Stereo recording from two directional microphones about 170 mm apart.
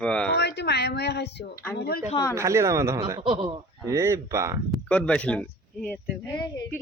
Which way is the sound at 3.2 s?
30° right (ahead or behind).